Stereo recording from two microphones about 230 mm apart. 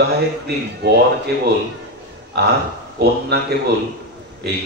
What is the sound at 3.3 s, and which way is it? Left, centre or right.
A man's voice, right.